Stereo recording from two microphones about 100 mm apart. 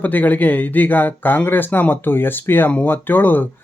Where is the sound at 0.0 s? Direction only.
15° left (ahead or behind).